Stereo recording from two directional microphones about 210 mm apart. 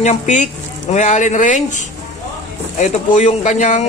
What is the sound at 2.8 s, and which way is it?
Speech, 35° left (ahead or behind).